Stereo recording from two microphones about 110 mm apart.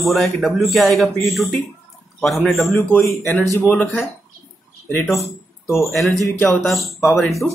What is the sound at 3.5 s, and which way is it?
Speech, 25° left (ahead or behind).